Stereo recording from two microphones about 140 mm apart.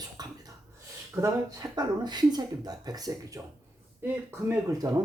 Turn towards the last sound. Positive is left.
turn(degrees=-25)  # may be behind; listen again after turning